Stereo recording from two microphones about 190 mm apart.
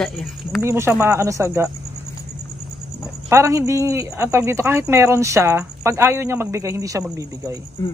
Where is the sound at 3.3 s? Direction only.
15° right (ahead or behind).